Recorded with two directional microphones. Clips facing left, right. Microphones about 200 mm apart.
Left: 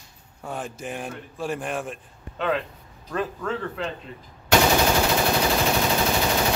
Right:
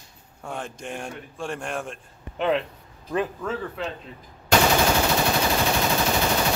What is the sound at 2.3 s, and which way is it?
Speech, 20° right (ahead or behind).